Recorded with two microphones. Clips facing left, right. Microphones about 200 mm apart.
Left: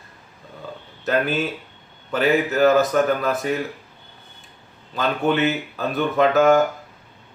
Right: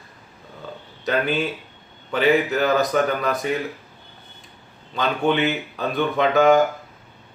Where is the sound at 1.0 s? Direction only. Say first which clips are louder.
Left 1 dB; centre (ahead or behind).